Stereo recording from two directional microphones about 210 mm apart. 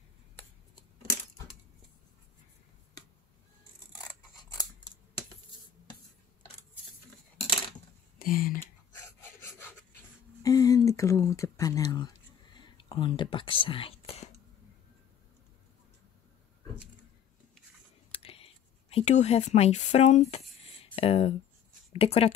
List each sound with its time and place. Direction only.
4.4 s scissors: 20° left (ahead or behind)
8.2 s speech: 40° left (ahead or behind)
9.0 s rub: 10° left (ahead or behind)
12.5 s whispering: 25° left (ahead or behind)
18.1 s a sound: 25° left (ahead or behind)
21.9 s speech: 30° left (ahead or behind)